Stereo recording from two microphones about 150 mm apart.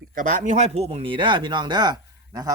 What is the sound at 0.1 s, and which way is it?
Speech, 60° right (ahead or behind).